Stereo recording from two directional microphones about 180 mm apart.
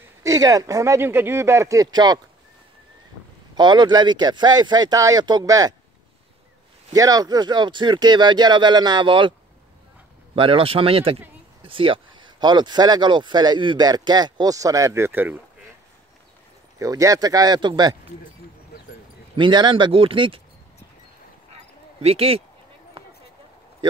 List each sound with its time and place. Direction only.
0.2 s speech: 20° right (ahead or behind)
3.5 s speech: 25° right (ahead or behind)
6.9 s speech: 20° right (ahead or behind)
10.3 s speech: 30° right (ahead or behind); by 15.3 s 10° right (ahead or behind)
16.7 s speech: 20° right (ahead or behind)
19.3 s speech: 25° right (ahead or behind)
22.0 s speech: 35° right (ahead or behind)